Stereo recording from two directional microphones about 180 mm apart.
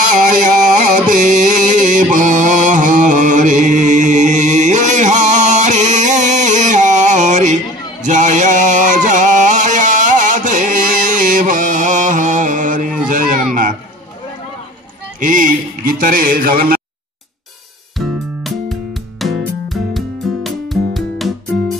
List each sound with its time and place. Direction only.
0.9 s music: 45° right (ahead or behind)
11.1 s mantra: 45° right (ahead or behind)
15.1 s music: 50° right (ahead or behind)
17.9 s music: centre (ahead or behind)